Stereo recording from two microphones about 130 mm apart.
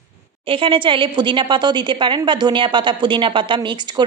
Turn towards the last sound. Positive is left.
turn(degrees=-35)  # may be behind; listen again after turning